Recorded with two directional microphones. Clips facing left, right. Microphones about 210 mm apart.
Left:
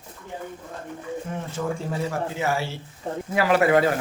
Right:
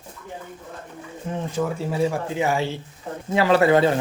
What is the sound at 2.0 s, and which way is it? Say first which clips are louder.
Speech: right 5 dB; 15° right (ahead or behind).